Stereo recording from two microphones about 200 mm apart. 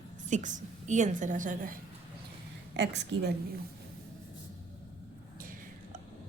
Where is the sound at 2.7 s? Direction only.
60° right (ahead or behind).